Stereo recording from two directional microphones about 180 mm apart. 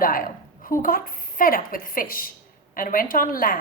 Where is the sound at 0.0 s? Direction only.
50° left (ahead or behind).